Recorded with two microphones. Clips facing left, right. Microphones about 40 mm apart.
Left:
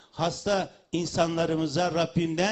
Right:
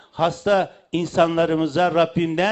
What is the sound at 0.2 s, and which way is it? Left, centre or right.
A man's voice, right.